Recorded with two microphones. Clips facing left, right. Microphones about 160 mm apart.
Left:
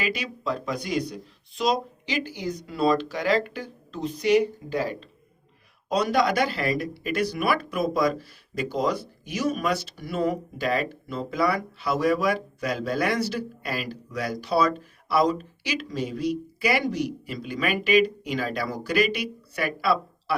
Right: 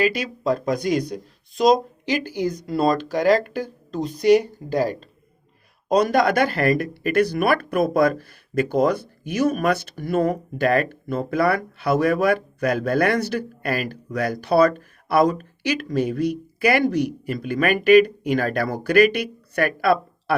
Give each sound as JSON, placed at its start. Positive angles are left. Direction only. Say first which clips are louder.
{"t": 0.0, "sound": "speech", "louder": "right 7 dB", "side_deg": -45}